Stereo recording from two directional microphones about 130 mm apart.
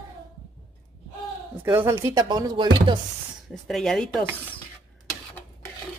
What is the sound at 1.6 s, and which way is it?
Speech, 20° right (ahead or behind).